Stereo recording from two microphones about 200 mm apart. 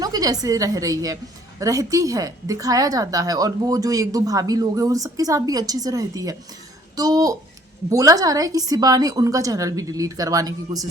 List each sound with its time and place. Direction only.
0.0 s a woman's voice: 20° right (ahead or behind)